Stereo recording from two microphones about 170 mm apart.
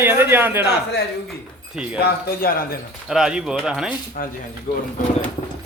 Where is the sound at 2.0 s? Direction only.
60° left (ahead or behind).